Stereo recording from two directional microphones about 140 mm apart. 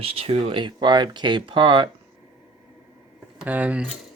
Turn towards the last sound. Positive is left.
turn(degrees=-10)  # may be behind; listen again after turning